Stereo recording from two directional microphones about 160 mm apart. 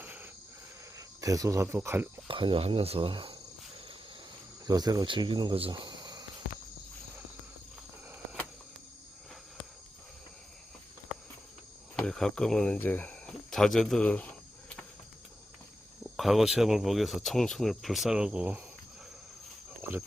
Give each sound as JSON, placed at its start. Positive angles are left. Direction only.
{"t": 0.0, "sound": "cricket", "side_deg": -10}
{"t": 0.9, "sound": "speech", "side_deg": -20}
{"t": 2.2, "sound": "speech", "side_deg": -30}
{"t": 4.6, "sound": "speech", "side_deg": -25}
{"t": 11.9, "sound": "speech", "side_deg": 5}
{"t": 16.1, "sound": "speech", "side_deg": 0}